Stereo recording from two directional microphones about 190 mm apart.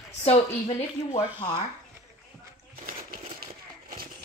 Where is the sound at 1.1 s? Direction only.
25° left (ahead or behind).